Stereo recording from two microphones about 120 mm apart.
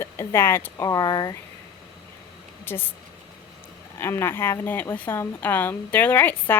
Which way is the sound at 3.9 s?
20° left (ahead or behind).